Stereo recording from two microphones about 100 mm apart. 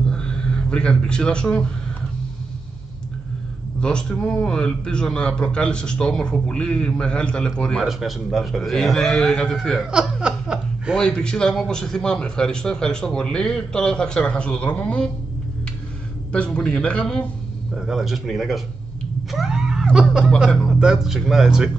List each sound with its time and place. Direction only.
0.0 s a sound: 10° left (ahead or behind)
3.8 s a man's voice: 10° left (ahead or behind)
10.2 s laughter: 10° right (ahead or behind)
11.0 s a man's voice: 5° left (ahead or behind)
16.3 s a man's voice: 10° left (ahead or behind)
17.7 s a man's voice: 5° right (ahead or behind)
19.3 s a sound: 5° right (ahead or behind)
20.3 s a man's voice: centre (ahead or behind)